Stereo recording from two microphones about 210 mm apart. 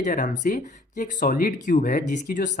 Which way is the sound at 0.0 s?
40° left (ahead or behind).